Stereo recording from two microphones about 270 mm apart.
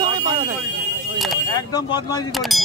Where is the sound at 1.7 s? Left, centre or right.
Centre.